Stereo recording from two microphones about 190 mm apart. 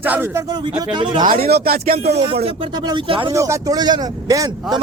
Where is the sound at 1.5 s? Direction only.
55° right (ahead or behind).